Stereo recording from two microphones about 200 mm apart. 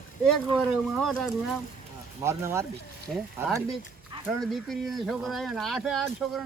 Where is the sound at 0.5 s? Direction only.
5° left (ahead or behind).